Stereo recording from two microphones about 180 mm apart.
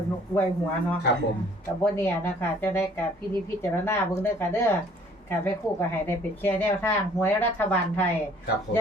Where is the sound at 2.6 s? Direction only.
10° left (ahead or behind).